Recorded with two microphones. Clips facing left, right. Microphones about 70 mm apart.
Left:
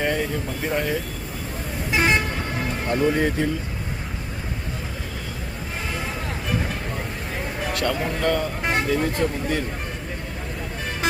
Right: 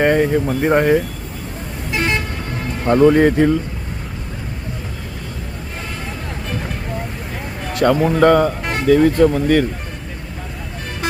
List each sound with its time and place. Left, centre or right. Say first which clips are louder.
0.0 s a sound: right 9 dB; right
0.6 s speech: right 10 dB; right
1.9 s vehicle: even; centre
2.8 s speech: right 10 dB; right
7.8 s speech: right 12 dB; right
8.9 s speech: right 11 dB; right
11.0 s music: right 1 dB; centre